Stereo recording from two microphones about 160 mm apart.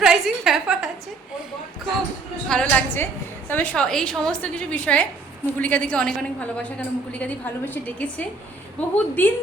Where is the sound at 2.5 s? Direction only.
10° left (ahead or behind).